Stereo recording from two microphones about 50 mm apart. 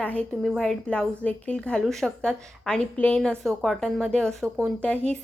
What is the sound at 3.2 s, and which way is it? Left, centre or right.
A woman's voice, centre.